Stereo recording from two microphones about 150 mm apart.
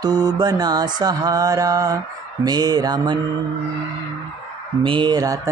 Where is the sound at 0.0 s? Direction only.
25° right (ahead or behind).